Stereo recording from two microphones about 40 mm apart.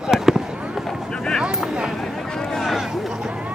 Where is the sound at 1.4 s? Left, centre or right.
Right.